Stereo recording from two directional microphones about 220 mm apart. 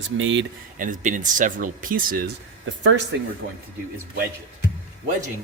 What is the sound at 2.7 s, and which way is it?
Speech, 60° right (ahead or behind).